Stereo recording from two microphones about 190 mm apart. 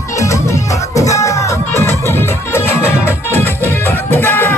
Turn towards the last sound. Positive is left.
turn(degrees=10)  # may be behind; listen again after turning